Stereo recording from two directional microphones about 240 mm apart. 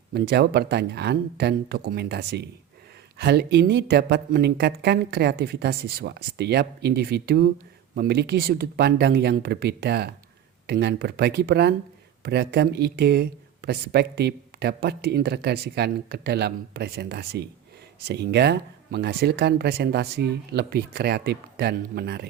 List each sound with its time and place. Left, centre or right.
0.1 s speech: right